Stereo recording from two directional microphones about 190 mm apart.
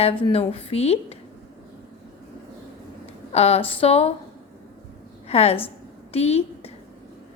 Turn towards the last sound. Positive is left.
turn(degrees=35)  # may be behind; listen again after turning